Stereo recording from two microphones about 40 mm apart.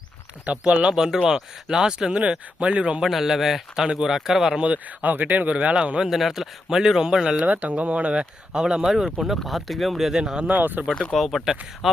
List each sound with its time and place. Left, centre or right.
0.4 s speech: right
0.9 s speech: centre
2.1 s speech: right
3.0 s speech: centre
4.6 s speech: right
5.7 s speech: right
6.1 s speech: centre
7.4 s speech: right; by 8.9 s centre
9.1 s speech: centre
10.2 s speech: centre
10.5 s speech: right
11.1 s speech: centre